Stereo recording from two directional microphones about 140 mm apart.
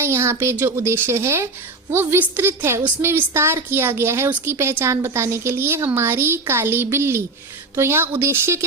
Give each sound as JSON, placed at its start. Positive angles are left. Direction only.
{"t": 0.0, "sound": "a woman's voice", "side_deg": -20}